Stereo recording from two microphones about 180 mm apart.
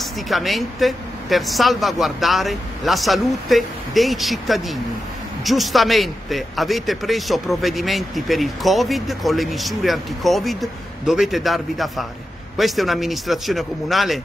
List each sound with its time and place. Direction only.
0.0 s a man's voice: centre (ahead or behind)